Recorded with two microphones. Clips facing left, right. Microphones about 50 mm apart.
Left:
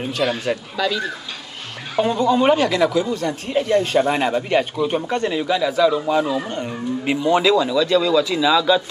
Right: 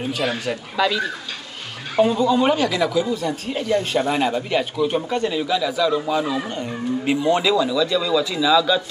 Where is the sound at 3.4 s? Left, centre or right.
Centre.